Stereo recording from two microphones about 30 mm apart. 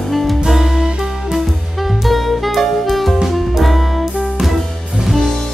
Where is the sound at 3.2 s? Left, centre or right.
Centre.